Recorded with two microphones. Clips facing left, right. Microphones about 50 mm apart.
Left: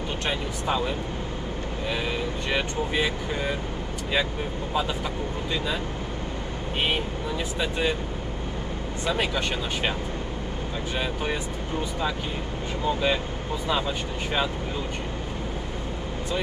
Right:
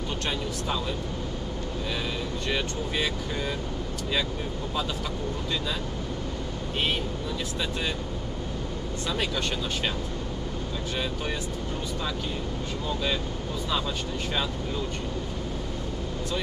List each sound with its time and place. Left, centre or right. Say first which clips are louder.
0.3 s speech: left 4 dB; left
2.5 s speech: left 4 dB; centre
9.0 s speech: left 4 dB; left
12.8 s speech: left 6 dB; centre